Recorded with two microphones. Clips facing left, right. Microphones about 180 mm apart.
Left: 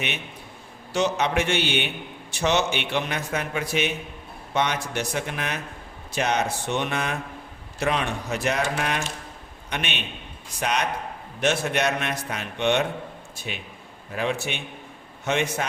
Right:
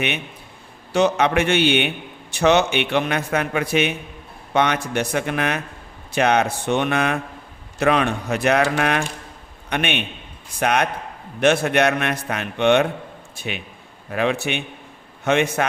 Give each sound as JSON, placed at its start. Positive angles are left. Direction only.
{"t": 0.9, "sound": "a man's voice", "side_deg": -60}